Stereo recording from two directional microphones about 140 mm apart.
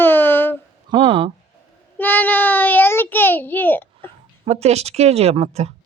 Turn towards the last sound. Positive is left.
turn(degrees=-50)  # may be behind; listen again after turning